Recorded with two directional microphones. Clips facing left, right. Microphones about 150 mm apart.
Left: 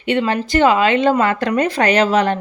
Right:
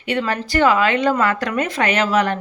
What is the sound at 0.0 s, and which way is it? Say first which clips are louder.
A woman's voice: left 4 dB; 25° left (ahead or behind).